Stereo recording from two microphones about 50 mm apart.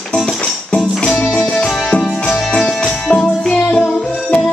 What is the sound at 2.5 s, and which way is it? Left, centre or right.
Music, centre.